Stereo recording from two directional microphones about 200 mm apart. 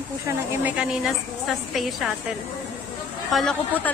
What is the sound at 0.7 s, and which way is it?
A woman's voice, 5° right (ahead or behind).